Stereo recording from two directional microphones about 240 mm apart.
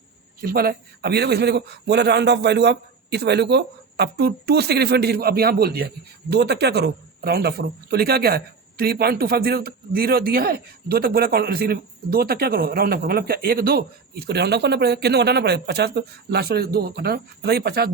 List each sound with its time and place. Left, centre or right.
0.4 s a man's voice: right